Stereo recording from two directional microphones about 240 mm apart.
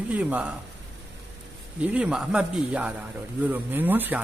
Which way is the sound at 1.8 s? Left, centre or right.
Centre.